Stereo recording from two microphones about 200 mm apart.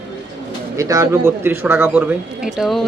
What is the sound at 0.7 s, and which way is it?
A man's voice, 15° right (ahead or behind).